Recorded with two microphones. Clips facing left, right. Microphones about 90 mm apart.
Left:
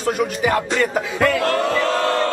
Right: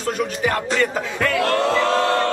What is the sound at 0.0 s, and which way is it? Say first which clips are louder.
Music: left 2 dB; 5° left (ahead or behind).